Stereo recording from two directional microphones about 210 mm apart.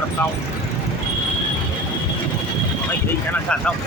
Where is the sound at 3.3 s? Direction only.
5° left (ahead or behind).